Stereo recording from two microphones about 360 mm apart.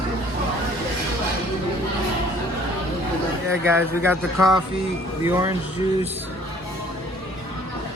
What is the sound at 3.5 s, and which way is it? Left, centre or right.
Speech, centre.